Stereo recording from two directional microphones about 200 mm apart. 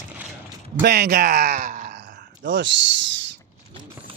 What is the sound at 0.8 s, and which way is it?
Speech, 55° right (ahead or behind).